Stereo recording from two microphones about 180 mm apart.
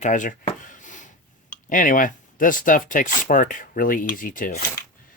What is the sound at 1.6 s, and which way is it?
Dishes, 45° left (ahead or behind).